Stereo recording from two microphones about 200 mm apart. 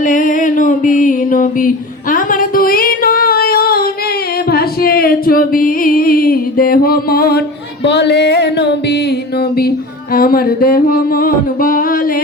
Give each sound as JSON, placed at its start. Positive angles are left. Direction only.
{"t": 0.0, "sound": "music", "side_deg": 40}
{"t": 4.5, "sound": "a sound", "side_deg": 50}
{"t": 7.9, "sound": "music", "side_deg": 60}
{"t": 10.2, "sound": "mantra", "side_deg": 50}